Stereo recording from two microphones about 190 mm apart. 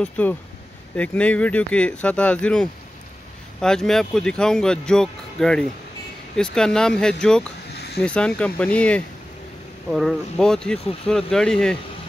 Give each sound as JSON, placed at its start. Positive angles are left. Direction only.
{"t": 0.0, "sound": "speech", "side_deg": 10}
{"t": 7.7, "sound": "a sound", "side_deg": 60}
{"t": 8.0, "sound": "speech", "side_deg": 5}